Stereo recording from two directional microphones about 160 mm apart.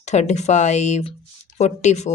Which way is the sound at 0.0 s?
45° left (ahead or behind).